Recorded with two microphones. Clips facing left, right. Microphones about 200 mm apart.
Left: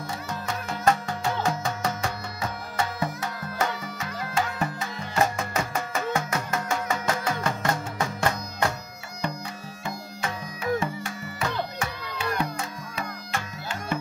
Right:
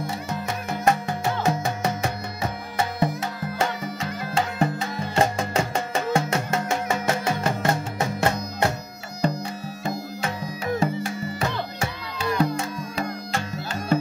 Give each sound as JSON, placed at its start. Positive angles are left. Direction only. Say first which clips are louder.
{"t": 0.0, "sound": "music", "louder": "right 4 dB", "side_deg": -20}
{"t": 9.8, "sound": "music", "louder": "right 4 dB", "side_deg": -35}